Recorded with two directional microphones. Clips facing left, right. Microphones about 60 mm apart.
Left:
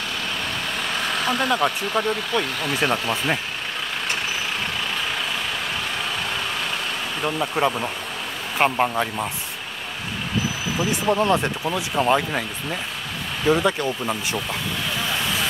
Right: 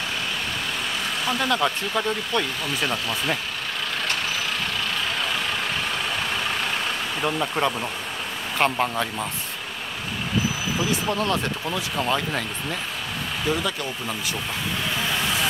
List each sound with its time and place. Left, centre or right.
1.4 s speech: centre
2.8 s speech: left
7.2 s speech: centre
7.6 s speech: centre
10.8 s speech: left
13.5 s speech: left